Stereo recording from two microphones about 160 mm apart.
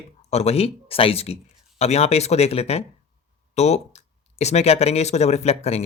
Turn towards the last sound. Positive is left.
turn(degrees=40)  # may be behind; listen again after turning